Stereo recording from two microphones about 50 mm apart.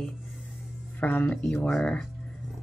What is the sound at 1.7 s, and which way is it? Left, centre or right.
Speech, centre.